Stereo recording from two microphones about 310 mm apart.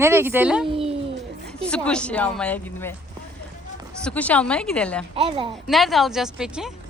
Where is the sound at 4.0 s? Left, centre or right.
Centre.